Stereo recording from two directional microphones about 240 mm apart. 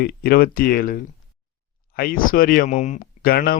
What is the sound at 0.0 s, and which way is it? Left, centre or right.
A man's voice, left.